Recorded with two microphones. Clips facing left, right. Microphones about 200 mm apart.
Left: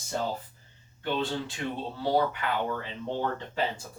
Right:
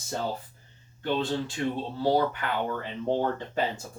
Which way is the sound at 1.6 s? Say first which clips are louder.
Right 5 dB; 30° right (ahead or behind).